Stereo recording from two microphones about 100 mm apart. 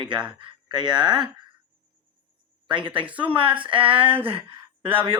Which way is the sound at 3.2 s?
60° right (ahead or behind).